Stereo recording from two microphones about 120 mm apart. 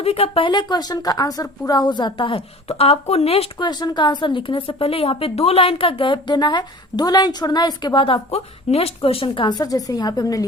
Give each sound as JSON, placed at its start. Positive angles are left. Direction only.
{"t": 0.0, "sound": "speech", "side_deg": 60}
{"t": 0.4, "sound": "a woman's voice", "side_deg": 40}
{"t": 3.6, "sound": "a woman's voice", "side_deg": 35}